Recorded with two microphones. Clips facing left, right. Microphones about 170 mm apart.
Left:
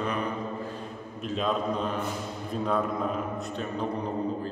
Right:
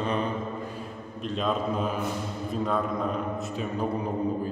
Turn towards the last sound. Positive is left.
turn(degrees=0)  # may be behind; listen again after turning